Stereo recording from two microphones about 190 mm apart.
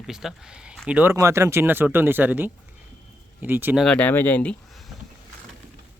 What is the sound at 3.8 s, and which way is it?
Speech, 5° left (ahead or behind).